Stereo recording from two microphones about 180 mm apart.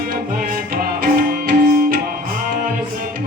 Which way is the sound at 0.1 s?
55° right (ahead or behind).